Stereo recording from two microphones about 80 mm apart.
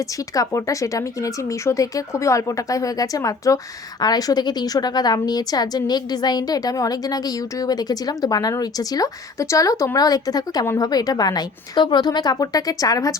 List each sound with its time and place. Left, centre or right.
0.3 s a woman's voice: left
4.0 s a woman's voice: left